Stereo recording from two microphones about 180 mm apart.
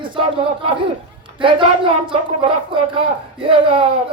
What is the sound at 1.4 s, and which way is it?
Speech, 30° right (ahead or behind).